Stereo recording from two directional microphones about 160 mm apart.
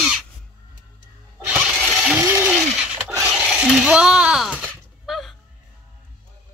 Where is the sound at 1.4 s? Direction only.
5° right (ahead or behind).